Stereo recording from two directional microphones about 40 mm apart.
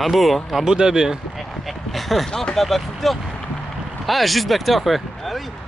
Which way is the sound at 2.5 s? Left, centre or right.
Centre.